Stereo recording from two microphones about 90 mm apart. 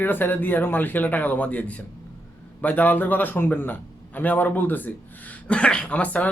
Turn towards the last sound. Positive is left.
turn(degrees=15)  # may be behind; listen again after turning